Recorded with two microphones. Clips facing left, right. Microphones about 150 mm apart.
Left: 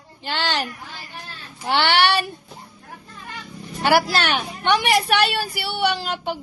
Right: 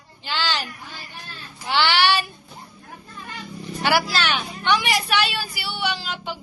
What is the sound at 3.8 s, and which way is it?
A woman's voice, 45° left (ahead or behind).